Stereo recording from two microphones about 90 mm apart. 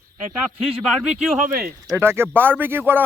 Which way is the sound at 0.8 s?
5° right (ahead or behind).